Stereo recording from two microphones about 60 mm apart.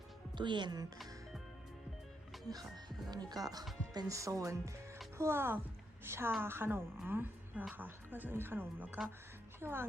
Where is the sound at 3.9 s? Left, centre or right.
Right.